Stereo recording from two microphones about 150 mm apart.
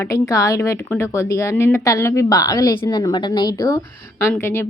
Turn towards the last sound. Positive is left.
turn(degrees=15)  # may be behind; listen again after turning